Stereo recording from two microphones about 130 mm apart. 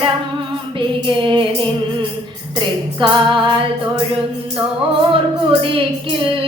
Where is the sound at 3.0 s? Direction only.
40° right (ahead or behind).